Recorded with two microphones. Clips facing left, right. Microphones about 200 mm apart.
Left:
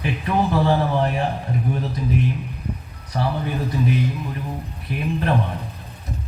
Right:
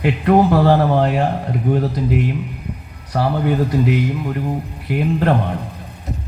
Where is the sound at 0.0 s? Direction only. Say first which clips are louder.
Right 8 dB; 70° right (ahead or behind).